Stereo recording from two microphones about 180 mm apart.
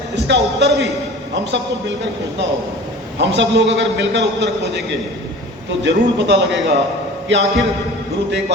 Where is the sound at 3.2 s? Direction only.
75° right (ahead or behind).